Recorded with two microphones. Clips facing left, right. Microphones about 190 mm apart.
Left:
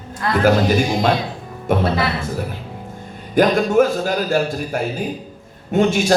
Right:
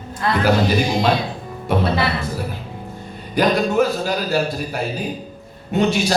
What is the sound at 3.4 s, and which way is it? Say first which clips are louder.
A man's voice: left 3 dB; 50° left (ahead or behind).